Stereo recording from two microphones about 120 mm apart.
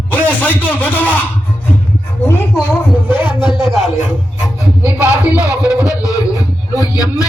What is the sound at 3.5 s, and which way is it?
Speech, centre (ahead or behind).